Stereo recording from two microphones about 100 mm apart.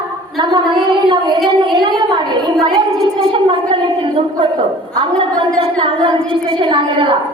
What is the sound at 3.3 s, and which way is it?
Gargling, 60° right (ahead or behind).